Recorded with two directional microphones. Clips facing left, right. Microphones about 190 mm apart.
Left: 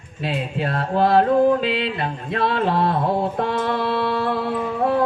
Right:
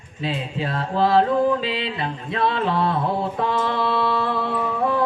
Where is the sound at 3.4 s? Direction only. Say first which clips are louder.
Left 1 dB; 55° left (ahead or behind).